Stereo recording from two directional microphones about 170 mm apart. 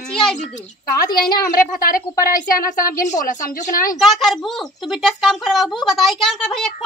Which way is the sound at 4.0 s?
Centre (ahead or behind).